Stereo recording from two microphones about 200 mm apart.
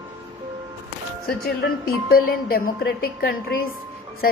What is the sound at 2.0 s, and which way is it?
A woman's voice, 50° left (ahead or behind).